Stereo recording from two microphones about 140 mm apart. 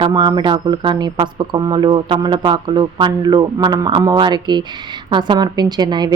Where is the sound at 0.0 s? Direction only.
30° right (ahead or behind).